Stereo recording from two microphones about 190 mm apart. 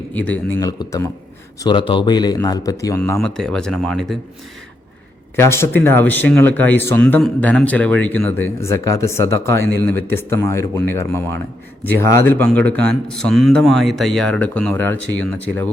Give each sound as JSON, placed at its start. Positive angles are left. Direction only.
{"t": 0.1, "sound": "a man's voice", "side_deg": 10}
{"t": 3.0, "sound": "speech", "side_deg": 5}
{"t": 5.4, "sound": "speech", "side_deg": 15}